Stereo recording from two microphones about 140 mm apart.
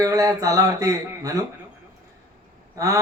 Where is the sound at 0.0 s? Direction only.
25° right (ahead or behind).